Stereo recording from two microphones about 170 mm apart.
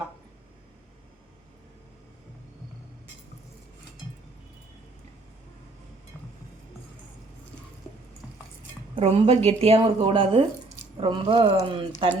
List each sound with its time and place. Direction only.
9.0 s a woman's voice: 35° right (ahead or behind)